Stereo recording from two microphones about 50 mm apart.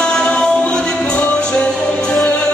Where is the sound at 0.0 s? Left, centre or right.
Left.